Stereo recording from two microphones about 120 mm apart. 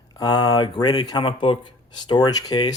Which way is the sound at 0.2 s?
35° left (ahead or behind).